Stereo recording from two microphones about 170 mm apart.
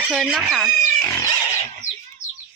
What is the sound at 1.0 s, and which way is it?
Pig, 20° left (ahead or behind).